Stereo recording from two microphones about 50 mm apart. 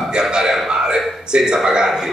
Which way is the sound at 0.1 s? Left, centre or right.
Centre.